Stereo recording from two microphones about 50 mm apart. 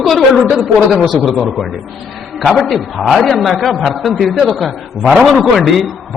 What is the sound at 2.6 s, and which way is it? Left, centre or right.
A man's voice, centre.